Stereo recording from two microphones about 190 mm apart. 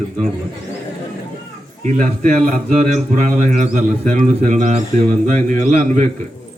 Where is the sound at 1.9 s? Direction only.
40° right (ahead or behind).